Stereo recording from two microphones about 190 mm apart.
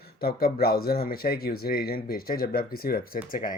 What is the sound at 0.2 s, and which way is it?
Speech, 50° left (ahead or behind).